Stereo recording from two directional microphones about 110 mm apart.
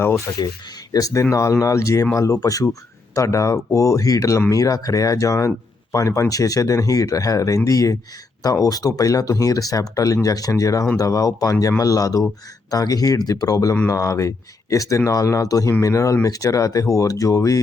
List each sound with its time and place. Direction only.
0.3 s speech: 25° left (ahead or behind)